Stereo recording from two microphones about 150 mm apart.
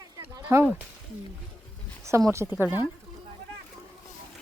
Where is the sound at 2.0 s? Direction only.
20° right (ahead or behind).